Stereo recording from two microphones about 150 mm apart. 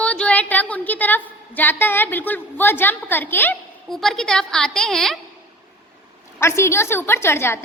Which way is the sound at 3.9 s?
Centre (ahead or behind).